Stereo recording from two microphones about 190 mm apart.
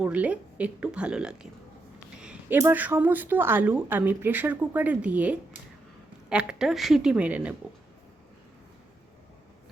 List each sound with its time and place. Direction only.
0.0 s a woman's voice: 5° right (ahead or behind)